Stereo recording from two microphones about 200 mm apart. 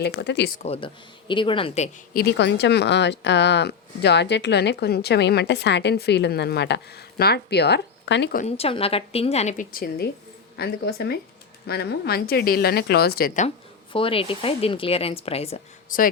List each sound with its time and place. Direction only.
0.0 s speech: 55° left (ahead or behind)
0.6 s speech: 30° left (ahead or behind)
2.1 s speech: 60° left (ahead or behind)
8.4 s a woman's voice: 30° left (ahead or behind)
13.9 s speech: 25° left (ahead or behind)